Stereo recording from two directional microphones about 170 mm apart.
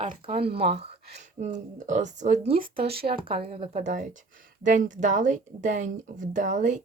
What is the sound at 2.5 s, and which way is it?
Speech, 60° right (ahead or behind).